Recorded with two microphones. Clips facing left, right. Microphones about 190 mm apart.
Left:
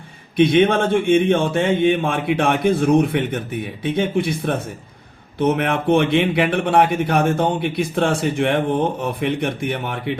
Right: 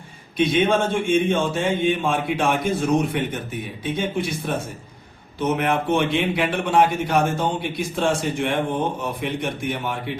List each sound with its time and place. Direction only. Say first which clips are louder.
0.3 s a man's voice: left 4 dB; 60° left (ahead or behind)